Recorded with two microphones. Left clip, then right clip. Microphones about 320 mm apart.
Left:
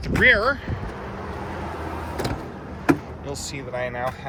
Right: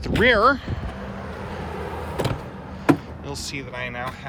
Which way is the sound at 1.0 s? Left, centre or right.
Left.